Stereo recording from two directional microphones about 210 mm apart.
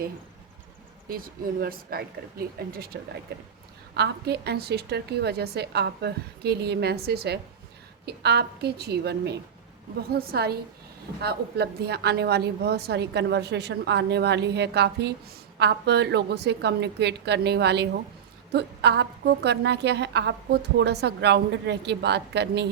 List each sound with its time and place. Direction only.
1.0 s a woman's voice: 45° right (ahead or behind)